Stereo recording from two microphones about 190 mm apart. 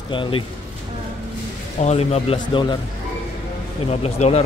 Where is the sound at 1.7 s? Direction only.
35° left (ahead or behind).